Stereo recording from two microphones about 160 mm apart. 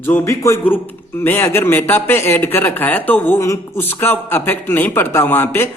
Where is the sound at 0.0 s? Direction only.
15° left (ahead or behind).